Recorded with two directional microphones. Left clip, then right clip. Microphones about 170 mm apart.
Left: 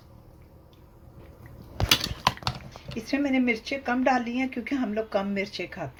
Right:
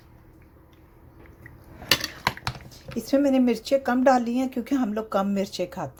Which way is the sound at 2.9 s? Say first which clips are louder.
Right 5 dB; 45° right (ahead or behind).